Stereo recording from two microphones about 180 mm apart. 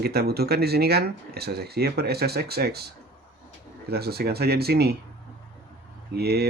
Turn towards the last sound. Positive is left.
turn(degrees=-60)  # may be behind; listen again after turning